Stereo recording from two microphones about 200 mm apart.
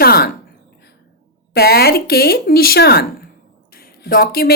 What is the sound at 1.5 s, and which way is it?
A woman's voice, 50° left (ahead or behind).